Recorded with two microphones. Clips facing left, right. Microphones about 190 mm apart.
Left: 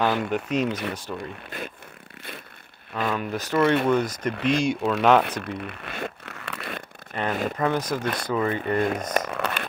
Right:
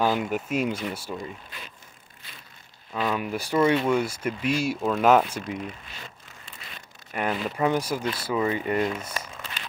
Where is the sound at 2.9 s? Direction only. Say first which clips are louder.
Even; 10° right (ahead or behind).